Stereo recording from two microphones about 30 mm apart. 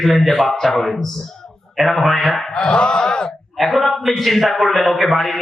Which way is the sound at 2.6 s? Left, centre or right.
Left.